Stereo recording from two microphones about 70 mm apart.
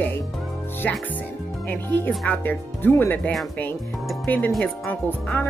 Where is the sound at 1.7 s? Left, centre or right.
Left.